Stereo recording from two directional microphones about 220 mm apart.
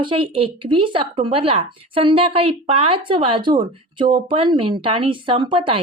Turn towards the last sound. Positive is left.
turn(degrees=-25)  # may be behind; listen again after turning